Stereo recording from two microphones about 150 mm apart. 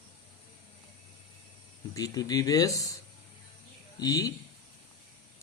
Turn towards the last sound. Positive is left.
turn(degrees=25)  # may be behind; listen again after turning